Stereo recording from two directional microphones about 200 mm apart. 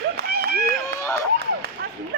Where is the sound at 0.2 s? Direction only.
50° right (ahead or behind).